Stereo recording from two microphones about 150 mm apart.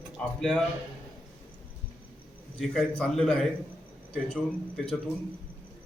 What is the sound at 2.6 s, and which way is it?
A man's voice, centre (ahead or behind).